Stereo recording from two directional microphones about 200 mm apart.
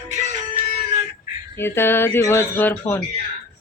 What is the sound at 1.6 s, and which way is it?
Speech, 10° left (ahead or behind).